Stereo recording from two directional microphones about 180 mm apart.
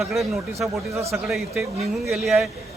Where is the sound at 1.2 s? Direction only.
Centre (ahead or behind).